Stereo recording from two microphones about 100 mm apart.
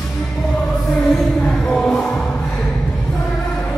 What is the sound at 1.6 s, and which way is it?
Music, 10° left (ahead or behind).